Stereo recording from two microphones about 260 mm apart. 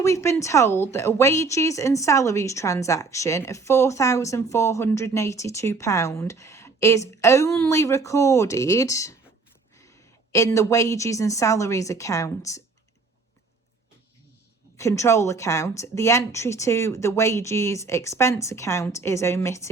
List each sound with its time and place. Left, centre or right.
0.0 s a woman's voice: centre
10.3 s a woman's voice: centre
14.8 s a woman's voice: centre